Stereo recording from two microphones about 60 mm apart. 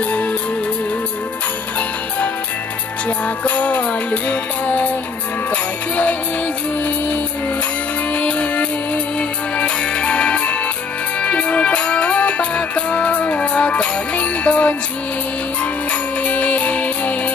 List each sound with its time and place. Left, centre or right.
3.4 s music: left
8.1 s music: left
16.3 s music: left